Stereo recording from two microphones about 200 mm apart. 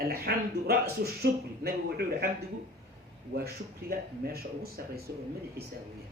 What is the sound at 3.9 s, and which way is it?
Speech, 50° right (ahead or behind).